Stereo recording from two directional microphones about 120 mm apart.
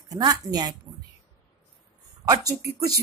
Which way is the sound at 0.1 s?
30° right (ahead or behind).